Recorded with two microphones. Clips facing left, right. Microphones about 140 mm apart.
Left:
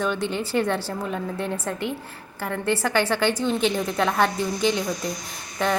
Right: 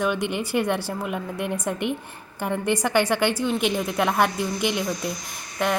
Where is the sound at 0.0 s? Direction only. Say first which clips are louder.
Right 1 dB; 15° right (ahead or behind).